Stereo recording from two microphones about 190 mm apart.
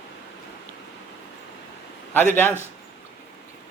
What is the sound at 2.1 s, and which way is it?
Speech, 10° left (ahead or behind).